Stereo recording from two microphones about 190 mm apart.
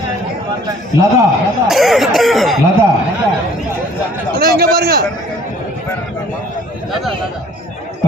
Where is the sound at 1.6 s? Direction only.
Centre (ahead or behind).